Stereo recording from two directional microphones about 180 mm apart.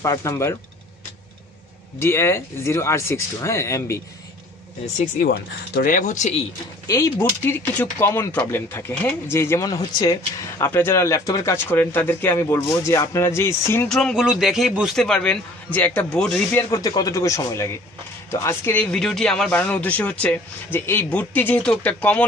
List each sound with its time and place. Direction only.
0.0 s speech: 15° left (ahead or behind)
2.0 s speech: 15° left (ahead or behind)
4.9 s speech: 55° left (ahead or behind)
6.9 s speech: 15° left (ahead or behind)
13.9 s a man's voice: centre (ahead or behind)
16.7 s speech: 20° left (ahead or behind)